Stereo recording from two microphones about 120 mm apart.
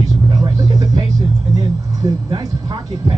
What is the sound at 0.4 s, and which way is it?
Vehicle, 30° right (ahead or behind).